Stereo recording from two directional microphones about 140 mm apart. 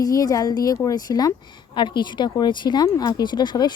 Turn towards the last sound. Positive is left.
turn(degrees=30)  # may be behind; listen again after turning